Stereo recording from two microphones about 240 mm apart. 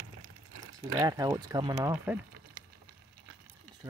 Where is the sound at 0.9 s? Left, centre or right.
Centre.